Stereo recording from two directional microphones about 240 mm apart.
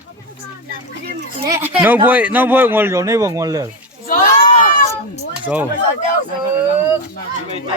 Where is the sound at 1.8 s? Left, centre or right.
Centre.